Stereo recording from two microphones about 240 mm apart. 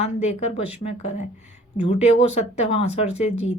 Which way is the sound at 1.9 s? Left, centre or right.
Left.